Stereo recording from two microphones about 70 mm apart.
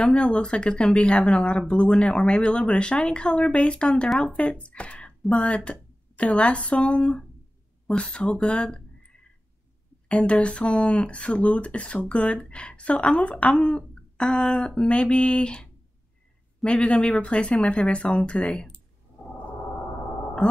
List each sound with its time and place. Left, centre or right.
0.0 s speech: centre
10.0 s speech: centre